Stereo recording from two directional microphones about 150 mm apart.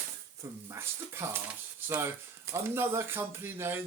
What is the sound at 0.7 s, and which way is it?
Speech, 15° right (ahead or behind).